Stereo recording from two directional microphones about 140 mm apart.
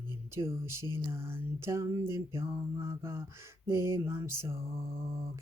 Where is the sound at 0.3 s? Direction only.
20° right (ahead or behind).